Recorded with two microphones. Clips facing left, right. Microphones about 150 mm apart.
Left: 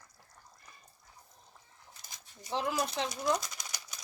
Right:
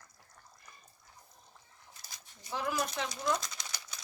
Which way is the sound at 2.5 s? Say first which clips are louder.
Left 2 dB; 25° left (ahead or behind).